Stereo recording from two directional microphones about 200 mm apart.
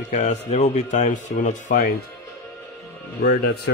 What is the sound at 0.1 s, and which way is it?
Speech, 35° left (ahead or behind).